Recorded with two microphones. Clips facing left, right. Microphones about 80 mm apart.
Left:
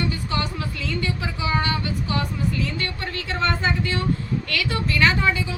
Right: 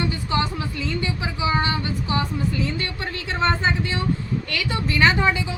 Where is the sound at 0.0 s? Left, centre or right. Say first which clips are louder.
Right 2 dB; right.